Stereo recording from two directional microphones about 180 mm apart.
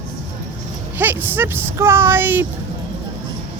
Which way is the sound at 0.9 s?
10° right (ahead or behind).